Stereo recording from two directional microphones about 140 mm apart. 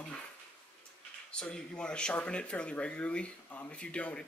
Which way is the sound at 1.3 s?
5° left (ahead or behind).